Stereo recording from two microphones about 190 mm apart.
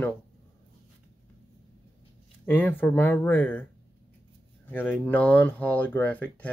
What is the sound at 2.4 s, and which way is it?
Speech, 10° left (ahead or behind).